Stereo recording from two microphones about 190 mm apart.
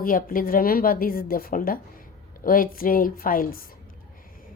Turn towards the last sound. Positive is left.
turn(degrees=50)  # may be behind; listen again after turning